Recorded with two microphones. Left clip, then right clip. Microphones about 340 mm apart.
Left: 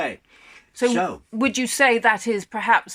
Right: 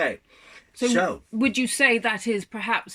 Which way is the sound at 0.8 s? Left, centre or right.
Centre.